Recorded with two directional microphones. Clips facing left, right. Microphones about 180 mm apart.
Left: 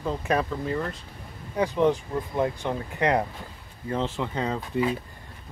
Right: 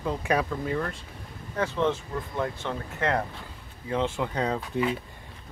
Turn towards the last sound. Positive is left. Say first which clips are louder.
# even
turn(degrees=5)  # may be behind; listen again after turning